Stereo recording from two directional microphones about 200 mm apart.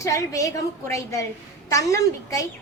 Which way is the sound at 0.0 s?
15° left (ahead or behind).